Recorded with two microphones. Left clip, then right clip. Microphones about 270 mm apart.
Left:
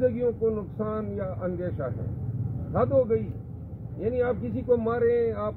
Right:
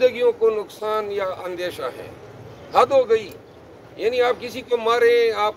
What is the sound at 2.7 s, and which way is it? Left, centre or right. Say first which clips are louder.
Speech: right 8 dB; right.